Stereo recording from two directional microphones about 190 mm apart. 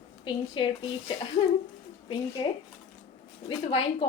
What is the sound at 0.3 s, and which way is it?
A woman's voice, 25° left (ahead or behind).